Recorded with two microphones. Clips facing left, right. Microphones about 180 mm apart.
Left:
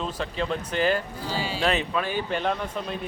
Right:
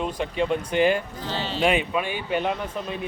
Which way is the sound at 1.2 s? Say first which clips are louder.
Right 1 dB; 10° left (ahead or behind).